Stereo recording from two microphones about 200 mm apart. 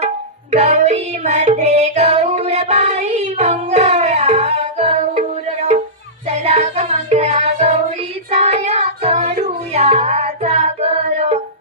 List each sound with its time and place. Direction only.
0.5 s music: 35° right (ahead or behind)
6.2 s music: 30° right (ahead or behind)